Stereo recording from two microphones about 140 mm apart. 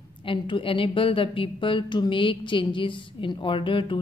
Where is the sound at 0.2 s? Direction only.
40° left (ahead or behind).